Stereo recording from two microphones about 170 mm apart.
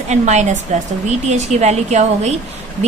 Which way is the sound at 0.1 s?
40° right (ahead or behind).